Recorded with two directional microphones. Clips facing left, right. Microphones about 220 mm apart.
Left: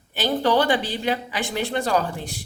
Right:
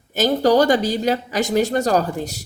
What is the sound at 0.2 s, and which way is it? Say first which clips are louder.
Speech: right 5 dB; 40° right (ahead or behind).